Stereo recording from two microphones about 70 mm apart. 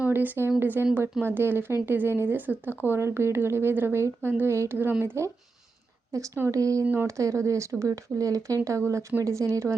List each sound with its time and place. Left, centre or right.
0.0 s a sound: right
0.6 s speech: right
6.8 s speech: right
7.2 s speech: right